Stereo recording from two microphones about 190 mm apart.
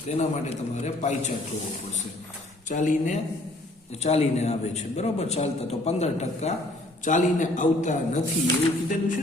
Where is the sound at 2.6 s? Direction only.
40° left (ahead or behind).